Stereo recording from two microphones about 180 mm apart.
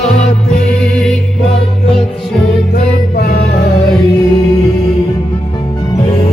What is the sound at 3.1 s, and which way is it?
Music, 60° left (ahead or behind).